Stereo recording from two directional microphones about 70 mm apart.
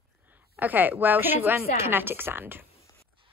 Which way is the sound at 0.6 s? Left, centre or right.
Right.